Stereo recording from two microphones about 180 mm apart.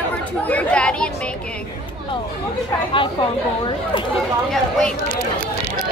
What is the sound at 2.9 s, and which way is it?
Speech, 30° left (ahead or behind).